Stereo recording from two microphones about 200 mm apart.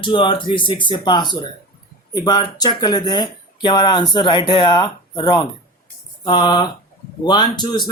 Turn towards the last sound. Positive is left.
turn(degrees=20)  # may be behind; listen again after turning